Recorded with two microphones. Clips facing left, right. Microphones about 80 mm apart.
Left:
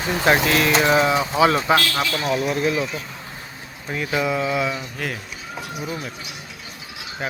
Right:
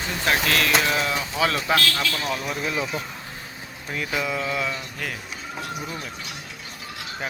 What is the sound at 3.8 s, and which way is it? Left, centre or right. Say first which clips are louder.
Speech: left 4 dB; centre.